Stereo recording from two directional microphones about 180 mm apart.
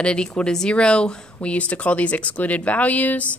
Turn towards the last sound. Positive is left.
turn(degrees=10)  # may be behind; listen again after turning